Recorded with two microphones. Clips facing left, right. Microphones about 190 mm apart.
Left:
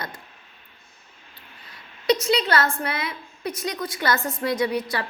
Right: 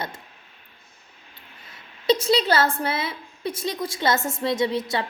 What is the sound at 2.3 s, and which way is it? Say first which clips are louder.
A woman's voice: right 2 dB; 30° right (ahead or behind).